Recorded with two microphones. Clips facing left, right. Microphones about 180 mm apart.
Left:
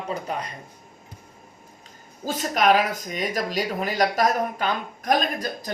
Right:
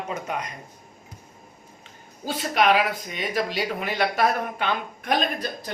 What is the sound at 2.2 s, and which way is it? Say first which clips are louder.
Speech: left 1 dB; 45° left (ahead or behind).